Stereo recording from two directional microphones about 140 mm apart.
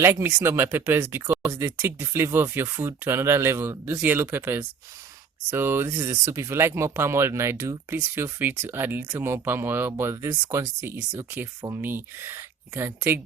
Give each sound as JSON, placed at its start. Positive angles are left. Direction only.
{"t": 0.0, "sound": "speech", "side_deg": -20}